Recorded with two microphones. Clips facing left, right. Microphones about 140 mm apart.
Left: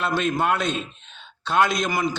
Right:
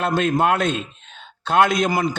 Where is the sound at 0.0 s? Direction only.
45° right (ahead or behind).